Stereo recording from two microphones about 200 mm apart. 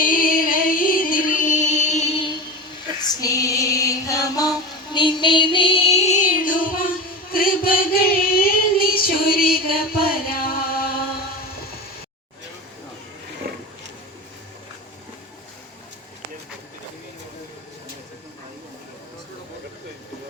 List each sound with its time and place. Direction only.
0.0 s music: 45° left (ahead or behind)
3.2 s female singing: 15° left (ahead or behind); by 6.9 s 45° left (ahead or behind)
7.3 s singing: 45° left (ahead or behind)
13.5 s roaring cats: 50° right (ahead or behind)